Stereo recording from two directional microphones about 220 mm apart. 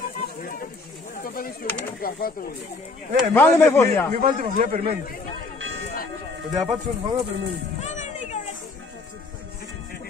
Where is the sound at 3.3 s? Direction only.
10° left (ahead or behind).